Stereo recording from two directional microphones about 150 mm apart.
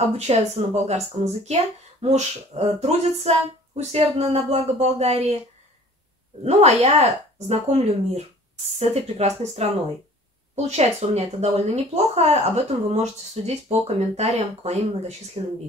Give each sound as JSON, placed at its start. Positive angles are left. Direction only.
{"t": 0.1, "sound": "speech", "side_deg": -45}
{"t": 6.4, "sound": "speech", "side_deg": -45}